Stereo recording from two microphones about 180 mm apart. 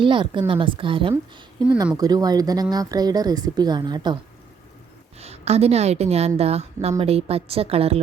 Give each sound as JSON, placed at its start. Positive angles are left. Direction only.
{"t": 0.0, "sound": "speech", "side_deg": -25}
{"t": 5.2, "sound": "a woman's voice", "side_deg": -35}